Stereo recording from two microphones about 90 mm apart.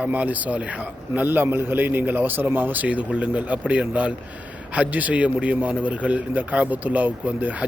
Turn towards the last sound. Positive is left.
turn(degrees=-15)  # may be behind; listen again after turning